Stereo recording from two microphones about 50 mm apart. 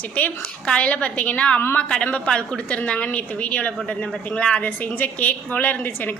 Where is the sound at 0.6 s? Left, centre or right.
Left.